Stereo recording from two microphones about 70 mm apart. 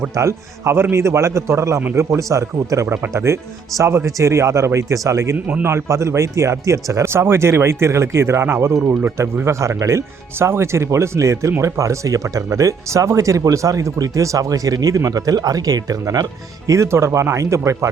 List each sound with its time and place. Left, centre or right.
0.1 s speech: right
2.8 s speech: right
3.8 s speech: right
16.6 s speech: right